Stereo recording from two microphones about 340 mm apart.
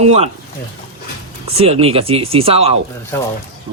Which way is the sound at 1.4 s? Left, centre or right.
Centre.